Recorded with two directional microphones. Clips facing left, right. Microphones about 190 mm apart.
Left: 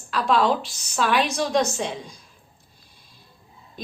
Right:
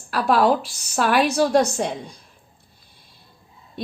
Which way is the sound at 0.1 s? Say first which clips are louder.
Right 3 dB; 60° right (ahead or behind).